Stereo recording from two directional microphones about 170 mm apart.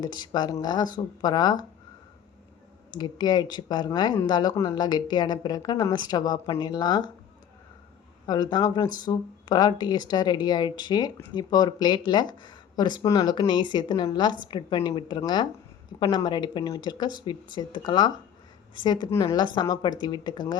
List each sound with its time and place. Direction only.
0.0 s speech: 25° left (ahead or behind)
2.9 s speech: 25° left (ahead or behind)
8.3 s speech: 25° left (ahead or behind)